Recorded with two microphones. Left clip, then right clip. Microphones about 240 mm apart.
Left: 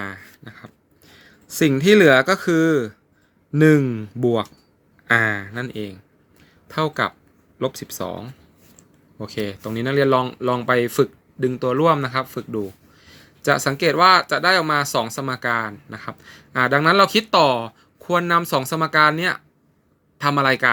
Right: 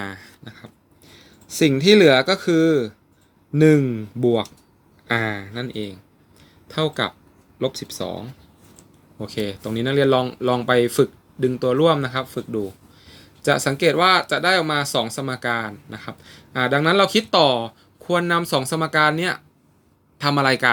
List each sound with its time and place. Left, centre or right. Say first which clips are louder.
0.0 s a sound: left 1 dB; centre
1.5 s speech: even; centre
7.7 s speech: right 3 dB; left
7.9 s speech: even; centre
13.0 s a sound: right 1 dB; left
13.4 s speech: even; centre